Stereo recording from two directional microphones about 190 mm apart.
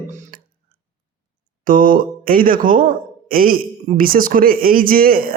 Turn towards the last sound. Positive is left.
turn(degrees=-50)  # may be behind; listen again after turning